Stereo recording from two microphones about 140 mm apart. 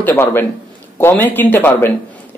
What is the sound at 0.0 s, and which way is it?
Speech, 15° left (ahead or behind).